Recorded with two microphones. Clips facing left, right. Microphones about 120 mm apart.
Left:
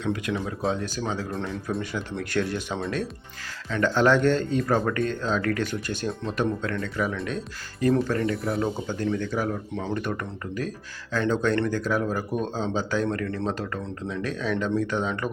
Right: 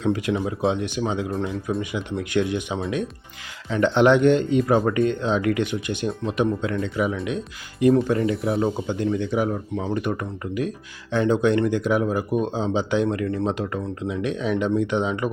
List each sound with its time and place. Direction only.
0.0 s speech: 25° right (ahead or behind)
1.3 s speech: 10° right (ahead or behind)
3.7 s speech: 20° right (ahead or behind)
8.2 s speech: 5° right (ahead or behind)
8.5 s speech: 15° right (ahead or behind)